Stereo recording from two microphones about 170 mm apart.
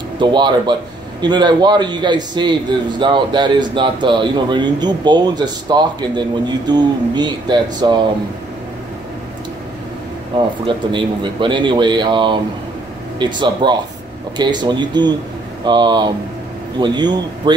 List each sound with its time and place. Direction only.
0.2 s speech: 25° right (ahead or behind)
10.3 s speech: 30° right (ahead or behind)